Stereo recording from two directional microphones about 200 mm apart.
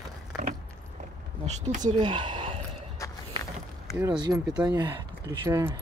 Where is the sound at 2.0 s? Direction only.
25° right (ahead or behind).